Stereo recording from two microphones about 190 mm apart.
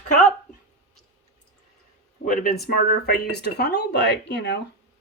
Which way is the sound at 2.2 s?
45° left (ahead or behind).